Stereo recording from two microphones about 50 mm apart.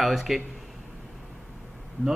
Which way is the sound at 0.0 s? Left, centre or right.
Centre.